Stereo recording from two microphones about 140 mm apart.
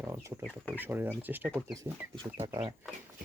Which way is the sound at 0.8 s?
15° right (ahead or behind).